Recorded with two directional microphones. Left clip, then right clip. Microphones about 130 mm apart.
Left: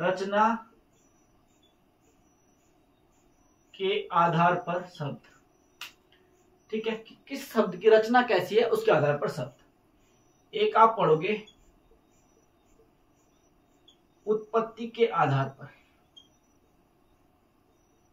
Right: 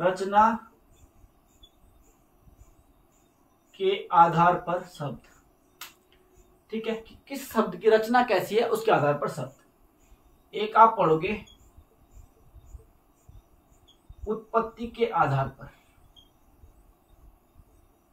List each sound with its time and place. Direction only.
0.1 s a woman's voice: 25° right (ahead or behind)
3.7 s a woman's voice: 25° right (ahead or behind)
6.8 s a woman's voice: 25° right (ahead or behind)
10.5 s speech: 20° right (ahead or behind)
14.2 s speech: 15° right (ahead or behind)